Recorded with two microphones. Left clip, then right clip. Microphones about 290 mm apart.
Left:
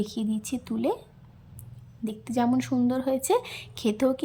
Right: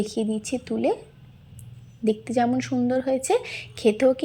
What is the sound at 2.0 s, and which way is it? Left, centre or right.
A woman's voice, centre.